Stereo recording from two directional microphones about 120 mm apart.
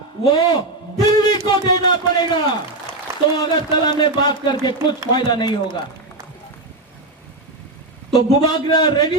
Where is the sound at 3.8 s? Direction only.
35° left (ahead or behind).